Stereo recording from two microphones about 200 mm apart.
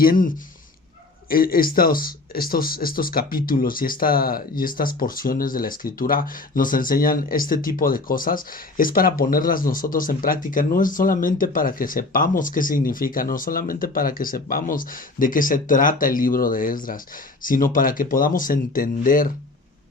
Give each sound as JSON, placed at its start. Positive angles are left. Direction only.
{"t": 0.0, "sound": "speech", "side_deg": 45}